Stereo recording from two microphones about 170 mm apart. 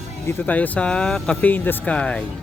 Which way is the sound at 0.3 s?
10° left (ahead or behind).